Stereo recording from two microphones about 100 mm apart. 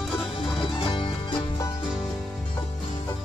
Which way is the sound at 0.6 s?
55° left (ahead or behind).